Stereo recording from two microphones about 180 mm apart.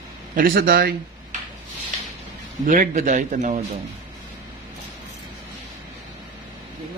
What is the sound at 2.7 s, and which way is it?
Speech, 45° right (ahead or behind).